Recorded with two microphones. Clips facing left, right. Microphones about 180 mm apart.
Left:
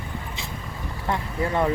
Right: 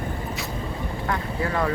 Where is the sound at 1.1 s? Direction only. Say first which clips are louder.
Left 2 dB; 25° left (ahead or behind).